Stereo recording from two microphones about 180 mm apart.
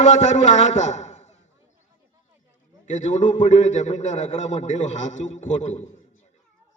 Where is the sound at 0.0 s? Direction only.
40° left (ahead or behind).